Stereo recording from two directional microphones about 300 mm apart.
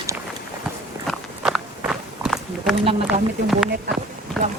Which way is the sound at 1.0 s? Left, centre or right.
Centre.